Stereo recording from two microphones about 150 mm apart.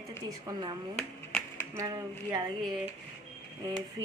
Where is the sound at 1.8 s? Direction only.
20° right (ahead or behind).